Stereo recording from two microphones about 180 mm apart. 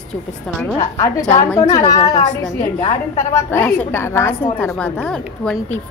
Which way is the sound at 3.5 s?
10° left (ahead or behind).